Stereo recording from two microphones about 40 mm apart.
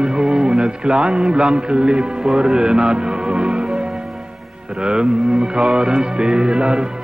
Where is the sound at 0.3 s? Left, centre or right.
Centre.